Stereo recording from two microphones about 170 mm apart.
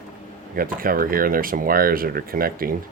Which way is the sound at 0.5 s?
55° right (ahead or behind).